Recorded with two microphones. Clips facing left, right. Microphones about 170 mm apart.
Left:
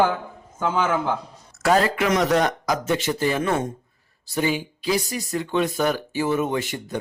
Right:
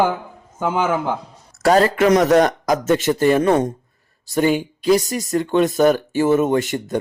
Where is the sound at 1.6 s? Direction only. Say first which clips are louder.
Right 5 dB; 40° right (ahead or behind).